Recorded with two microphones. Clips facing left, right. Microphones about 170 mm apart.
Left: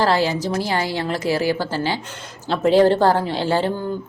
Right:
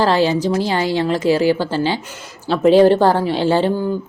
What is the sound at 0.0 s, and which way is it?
A woman's voice, 15° right (ahead or behind).